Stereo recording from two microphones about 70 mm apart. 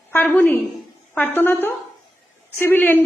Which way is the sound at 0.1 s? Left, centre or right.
Left.